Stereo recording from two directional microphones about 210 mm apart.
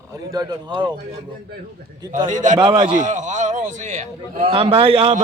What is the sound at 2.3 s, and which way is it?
Speech, 35° right (ahead or behind).